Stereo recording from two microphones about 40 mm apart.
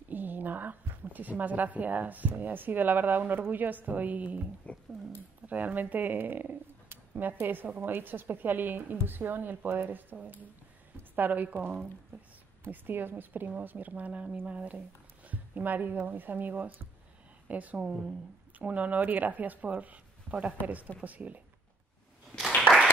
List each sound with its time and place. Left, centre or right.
0.1 s a woman's voice: right
5.5 s speech: right
10.2 s a sound: right
11.1 s speech: right
12.6 s speech: right
13.5 s speech: right
17.8 s speech: right
18.6 s speech: right